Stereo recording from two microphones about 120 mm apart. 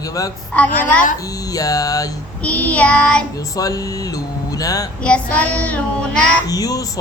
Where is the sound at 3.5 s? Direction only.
30° left (ahead or behind).